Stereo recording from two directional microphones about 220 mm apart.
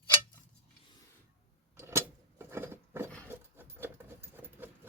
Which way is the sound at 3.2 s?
10° right (ahead or behind).